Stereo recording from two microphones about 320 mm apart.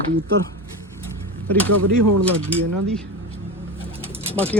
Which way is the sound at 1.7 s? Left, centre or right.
Right.